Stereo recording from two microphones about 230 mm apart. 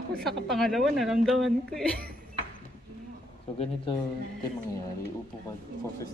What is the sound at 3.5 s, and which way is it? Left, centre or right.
Speech, left.